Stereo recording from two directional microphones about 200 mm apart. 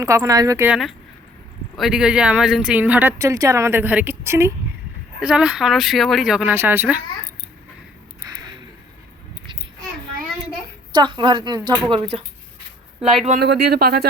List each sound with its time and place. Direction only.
0.0 s speech: 15° right (ahead or behind)
1.7 s speech: centre (ahead or behind)
10.9 s a woman's voice: 25° right (ahead or behind)
13.4 s speech: 55° right (ahead or behind)